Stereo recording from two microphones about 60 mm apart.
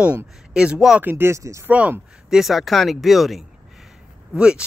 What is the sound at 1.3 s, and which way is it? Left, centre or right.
Speech, right.